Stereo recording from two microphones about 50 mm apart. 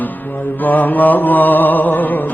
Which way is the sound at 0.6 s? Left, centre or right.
Left.